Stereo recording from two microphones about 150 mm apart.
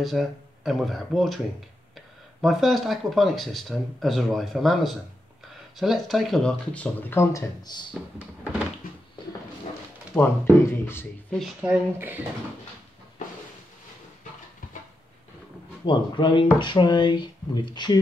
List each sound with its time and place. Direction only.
0.0 s speech: centre (ahead or behind); by 7.8 s 25° left (ahead or behind)
10.1 s speech: 15° left (ahead or behind)
11.6 s speech: 15° right (ahead or behind)
15.8 s speech: 35° left (ahead or behind)